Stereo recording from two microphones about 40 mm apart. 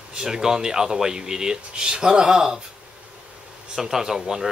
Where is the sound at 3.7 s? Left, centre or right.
Centre.